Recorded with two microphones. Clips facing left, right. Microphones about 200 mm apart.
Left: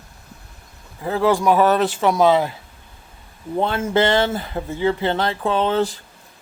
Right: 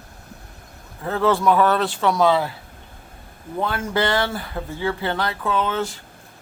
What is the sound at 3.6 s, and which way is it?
Speech, 25° left (ahead or behind).